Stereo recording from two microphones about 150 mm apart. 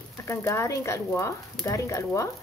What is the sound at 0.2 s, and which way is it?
Speech, 20° left (ahead or behind).